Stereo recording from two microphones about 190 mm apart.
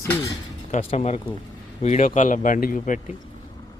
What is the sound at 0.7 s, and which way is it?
Speech, 35° left (ahead or behind).